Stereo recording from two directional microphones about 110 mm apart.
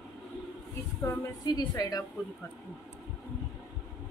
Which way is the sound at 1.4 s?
35° left (ahead or behind).